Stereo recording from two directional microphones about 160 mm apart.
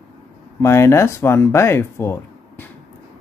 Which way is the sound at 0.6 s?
15° left (ahead or behind).